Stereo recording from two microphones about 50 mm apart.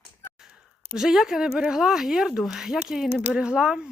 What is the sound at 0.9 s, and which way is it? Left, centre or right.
Speech, centre.